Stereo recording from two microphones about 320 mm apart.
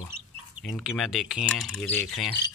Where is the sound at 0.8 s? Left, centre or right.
Centre.